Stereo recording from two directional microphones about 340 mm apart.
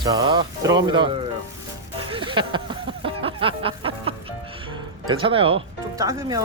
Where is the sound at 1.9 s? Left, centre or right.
Centre.